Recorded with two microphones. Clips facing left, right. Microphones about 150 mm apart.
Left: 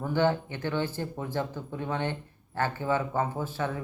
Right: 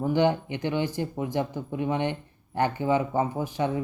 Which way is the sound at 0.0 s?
15° right (ahead or behind).